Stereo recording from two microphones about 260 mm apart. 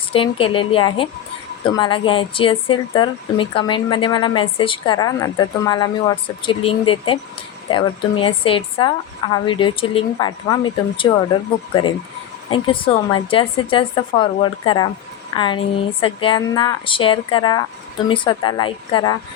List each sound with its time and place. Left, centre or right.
0.1 s speech: left